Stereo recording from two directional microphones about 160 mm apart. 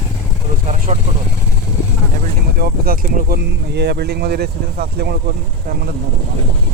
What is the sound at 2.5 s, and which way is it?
Speech, 70° right (ahead or behind).